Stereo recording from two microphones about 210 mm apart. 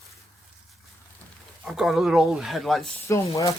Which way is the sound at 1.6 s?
Centre (ahead or behind).